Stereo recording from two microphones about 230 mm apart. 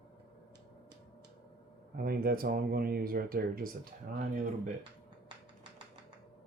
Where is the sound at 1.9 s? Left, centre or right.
Right.